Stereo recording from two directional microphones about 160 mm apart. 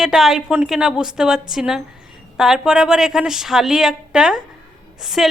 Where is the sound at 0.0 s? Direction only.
Centre (ahead or behind).